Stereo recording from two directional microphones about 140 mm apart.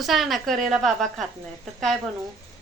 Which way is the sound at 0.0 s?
Centre (ahead or behind).